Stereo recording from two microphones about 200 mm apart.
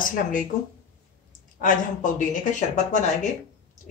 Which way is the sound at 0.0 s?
45° left (ahead or behind).